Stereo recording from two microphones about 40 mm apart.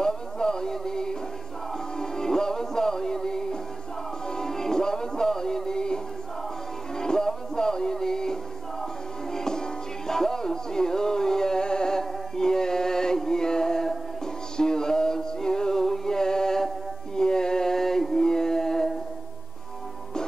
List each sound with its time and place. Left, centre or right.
0.0 s music: centre
7.0 s music: centre